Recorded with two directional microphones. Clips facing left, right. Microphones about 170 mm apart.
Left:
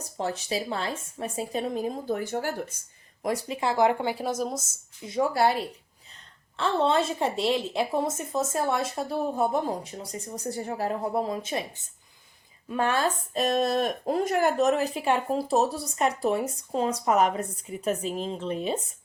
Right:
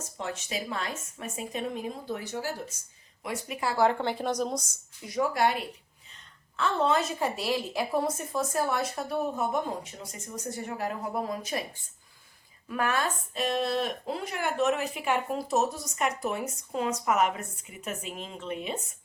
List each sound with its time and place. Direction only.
0.0 s speech: 35° left (ahead or behind); by 2.7 s 55° left (ahead or behind)
3.2 s speech: 35° left (ahead or behind)
3.6 s a woman's voice: 20° left (ahead or behind); by 4.8 s 5° left (ahead or behind)
5.0 s a woman's voice: 25° left (ahead or behind)